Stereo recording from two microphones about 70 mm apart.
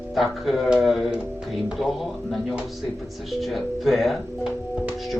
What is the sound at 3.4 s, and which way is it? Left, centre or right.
Speech, centre.